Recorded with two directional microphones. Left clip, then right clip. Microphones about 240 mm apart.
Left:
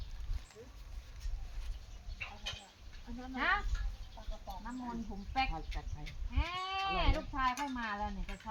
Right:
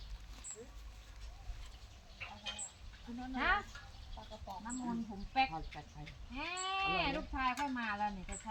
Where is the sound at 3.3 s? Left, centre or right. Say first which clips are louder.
Left 1 dB; centre.